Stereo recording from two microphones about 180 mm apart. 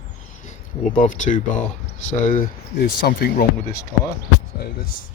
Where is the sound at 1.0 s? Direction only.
45° left (ahead or behind).